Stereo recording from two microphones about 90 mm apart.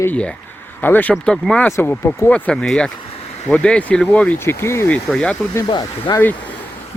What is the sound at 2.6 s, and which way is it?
Speech, 5° left (ahead or behind).